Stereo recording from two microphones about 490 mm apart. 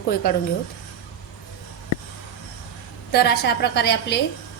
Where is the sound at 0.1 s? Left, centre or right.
Centre.